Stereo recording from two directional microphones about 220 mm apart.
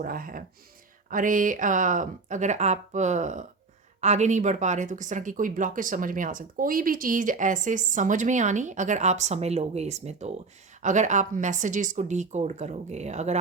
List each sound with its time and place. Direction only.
0.0 s speech: 40° right (ahead or behind)